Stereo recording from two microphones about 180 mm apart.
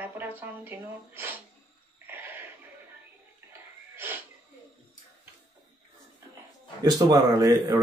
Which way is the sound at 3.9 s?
10° right (ahead or behind).